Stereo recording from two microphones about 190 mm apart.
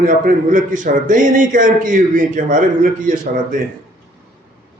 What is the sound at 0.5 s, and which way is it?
A man's voice, 40° right (ahead or behind).